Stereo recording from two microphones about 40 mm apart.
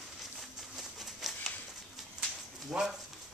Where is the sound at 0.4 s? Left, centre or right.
Centre.